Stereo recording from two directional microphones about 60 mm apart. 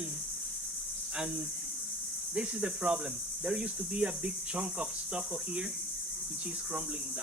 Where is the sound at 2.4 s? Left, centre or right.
Centre.